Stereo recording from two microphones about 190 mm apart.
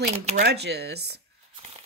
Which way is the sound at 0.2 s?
35° right (ahead or behind).